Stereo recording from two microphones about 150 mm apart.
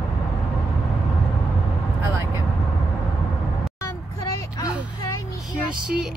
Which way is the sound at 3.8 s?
20° left (ahead or behind).